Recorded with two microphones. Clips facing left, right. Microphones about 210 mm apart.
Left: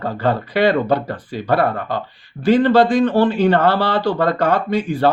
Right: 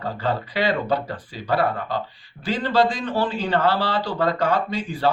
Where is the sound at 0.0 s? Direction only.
60° left (ahead or behind).